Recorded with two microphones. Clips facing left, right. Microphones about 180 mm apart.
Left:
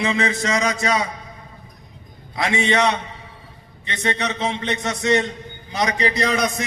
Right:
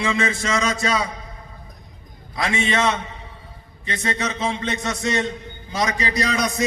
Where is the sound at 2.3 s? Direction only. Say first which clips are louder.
Left 2 dB; 20° left (ahead or behind).